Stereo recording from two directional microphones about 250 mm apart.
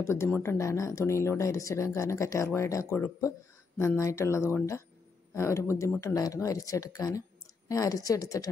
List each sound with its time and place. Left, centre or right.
0.0 s speech: centre